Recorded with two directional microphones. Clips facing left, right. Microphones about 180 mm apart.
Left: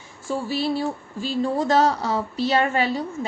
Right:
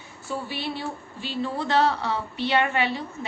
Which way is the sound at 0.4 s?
40° left (ahead or behind).